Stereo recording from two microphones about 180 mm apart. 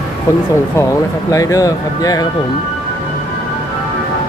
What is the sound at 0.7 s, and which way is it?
Speech, 15° left (ahead or behind).